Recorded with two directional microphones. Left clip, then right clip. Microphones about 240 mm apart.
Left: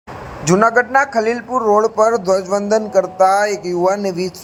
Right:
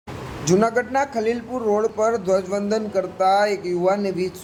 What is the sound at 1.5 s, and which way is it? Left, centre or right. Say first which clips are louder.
Speech: left 9 dB; centre.